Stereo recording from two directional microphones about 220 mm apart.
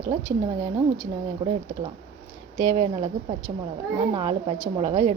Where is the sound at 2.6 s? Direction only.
20° right (ahead or behind).